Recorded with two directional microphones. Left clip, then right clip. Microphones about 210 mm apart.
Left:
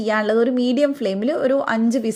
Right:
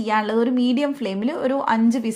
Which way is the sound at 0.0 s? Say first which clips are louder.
Left 2 dB; 15° left (ahead or behind).